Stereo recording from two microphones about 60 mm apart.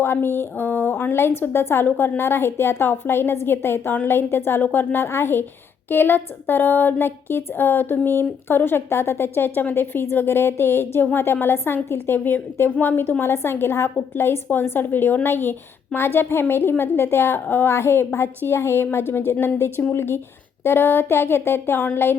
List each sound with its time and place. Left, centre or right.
0.0 s a woman's voice: left